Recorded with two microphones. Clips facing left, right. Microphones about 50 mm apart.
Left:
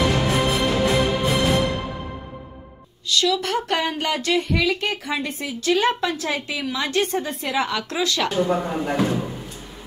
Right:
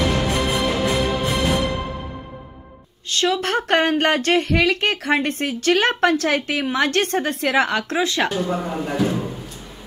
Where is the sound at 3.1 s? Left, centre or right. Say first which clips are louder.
Right 1 dB; right.